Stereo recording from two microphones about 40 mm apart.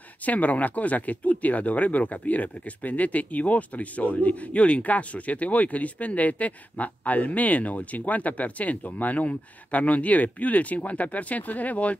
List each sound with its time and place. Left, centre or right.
0.2 s speech: left